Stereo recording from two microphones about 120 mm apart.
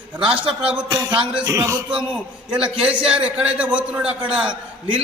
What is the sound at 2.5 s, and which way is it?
A man's voice, 10° right (ahead or behind).